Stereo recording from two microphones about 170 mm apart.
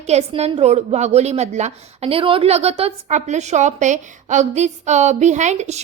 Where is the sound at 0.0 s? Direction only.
40° right (ahead or behind).